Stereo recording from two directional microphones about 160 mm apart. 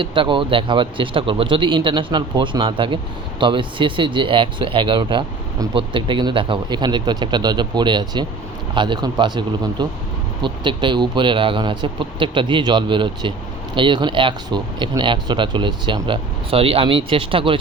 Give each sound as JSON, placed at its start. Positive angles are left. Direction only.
{"t": 0.0, "sound": "speech", "side_deg": -30}